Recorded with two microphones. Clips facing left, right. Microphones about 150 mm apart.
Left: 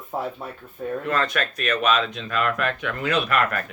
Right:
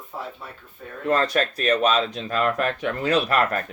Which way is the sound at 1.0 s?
35° right (ahead or behind).